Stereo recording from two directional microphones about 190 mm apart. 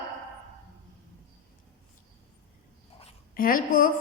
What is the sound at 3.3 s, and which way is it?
Speech, 50° left (ahead or behind).